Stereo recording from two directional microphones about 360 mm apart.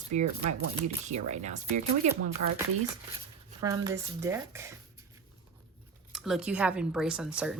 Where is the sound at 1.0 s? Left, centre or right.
Centre.